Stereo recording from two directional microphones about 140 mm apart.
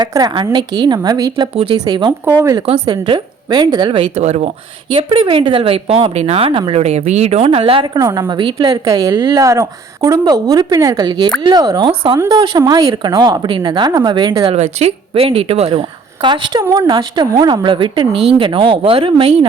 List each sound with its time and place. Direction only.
0.0 s a woman's voice: 30° right (ahead or behind)
2.6 s a woman's voice: 40° right (ahead or behind)
4.2 s speech: 55° right (ahead or behind)
4.9 s speech: 40° right (ahead or behind)
7.9 s a woman's voice: 25° right (ahead or behind)
14.5 s a woman's voice: 50° right (ahead or behind)